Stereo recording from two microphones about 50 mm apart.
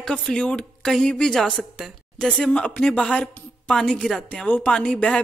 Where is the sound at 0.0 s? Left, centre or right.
Centre.